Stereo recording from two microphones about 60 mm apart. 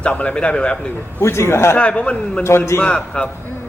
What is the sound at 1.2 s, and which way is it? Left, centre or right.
Speech, left.